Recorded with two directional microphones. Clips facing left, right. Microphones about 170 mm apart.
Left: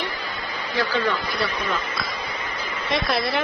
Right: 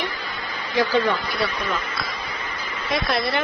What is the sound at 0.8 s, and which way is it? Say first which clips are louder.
Speech: right 4 dB; 15° right (ahead or behind).